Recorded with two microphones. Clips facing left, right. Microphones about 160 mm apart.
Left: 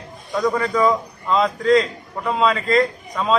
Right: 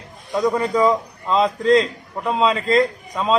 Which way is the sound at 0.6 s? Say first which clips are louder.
Right 1 dB; 25° right (ahead or behind).